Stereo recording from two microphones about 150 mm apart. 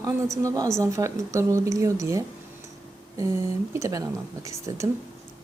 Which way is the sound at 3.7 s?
20° right (ahead or behind).